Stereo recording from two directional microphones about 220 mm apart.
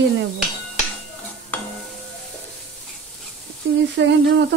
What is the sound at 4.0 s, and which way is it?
Speech, 50° right (ahead or behind).